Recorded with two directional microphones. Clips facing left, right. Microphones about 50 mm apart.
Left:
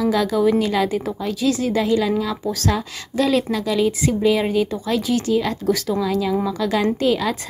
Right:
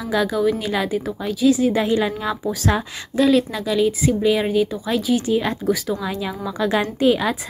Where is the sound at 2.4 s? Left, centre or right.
Centre.